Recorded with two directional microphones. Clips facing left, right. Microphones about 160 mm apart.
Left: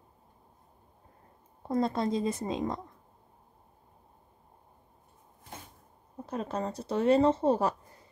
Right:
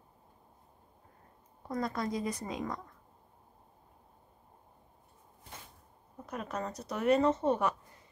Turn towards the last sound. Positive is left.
turn(degrees=30)  # may be behind; listen again after turning